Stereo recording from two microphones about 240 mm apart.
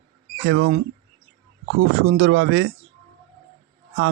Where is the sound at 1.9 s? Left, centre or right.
Right.